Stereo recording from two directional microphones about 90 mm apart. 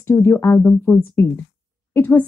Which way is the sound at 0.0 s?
30° left (ahead or behind).